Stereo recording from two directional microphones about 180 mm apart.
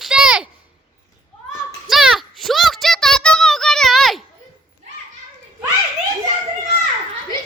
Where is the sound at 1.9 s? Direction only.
Centre (ahead or behind).